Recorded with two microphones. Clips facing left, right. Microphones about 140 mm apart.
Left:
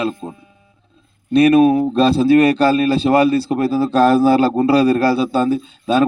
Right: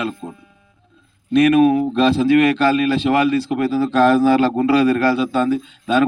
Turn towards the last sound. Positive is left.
turn(degrees=35)  # may be behind; listen again after turning